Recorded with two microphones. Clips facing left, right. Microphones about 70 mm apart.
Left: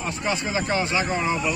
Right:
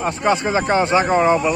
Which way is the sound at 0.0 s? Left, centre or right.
Right.